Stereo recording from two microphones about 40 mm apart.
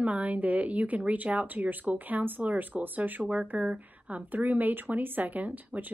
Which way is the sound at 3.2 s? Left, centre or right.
Right.